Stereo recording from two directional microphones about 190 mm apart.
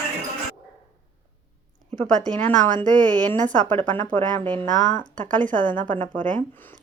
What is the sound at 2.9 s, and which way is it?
Speech, 20° right (ahead or behind).